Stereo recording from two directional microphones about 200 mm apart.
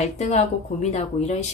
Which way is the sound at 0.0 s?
35° left (ahead or behind).